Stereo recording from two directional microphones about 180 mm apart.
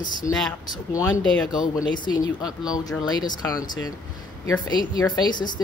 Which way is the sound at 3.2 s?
20° left (ahead or behind).